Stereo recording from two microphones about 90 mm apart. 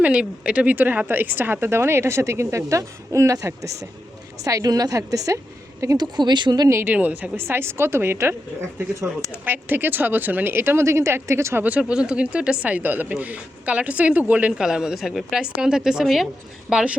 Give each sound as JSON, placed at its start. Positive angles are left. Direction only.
{"t": 0.0, "sound": "a woman's voice", "side_deg": -15}
{"t": 6.1, "sound": "speech", "side_deg": -55}
{"t": 6.7, "sound": "a woman's voice", "side_deg": -30}
{"t": 6.9, "sound": "a woman's voice", "side_deg": -15}
{"t": 11.6, "sound": "speech", "side_deg": -15}
{"t": 16.6, "sound": "speech", "side_deg": -10}